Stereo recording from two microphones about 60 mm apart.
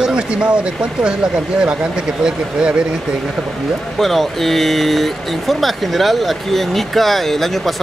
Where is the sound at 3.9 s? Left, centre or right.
Centre.